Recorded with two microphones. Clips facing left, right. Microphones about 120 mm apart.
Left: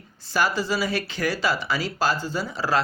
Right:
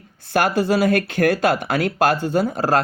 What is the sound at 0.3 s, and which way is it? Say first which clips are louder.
Speech: right 6 dB; 55° right (ahead or behind).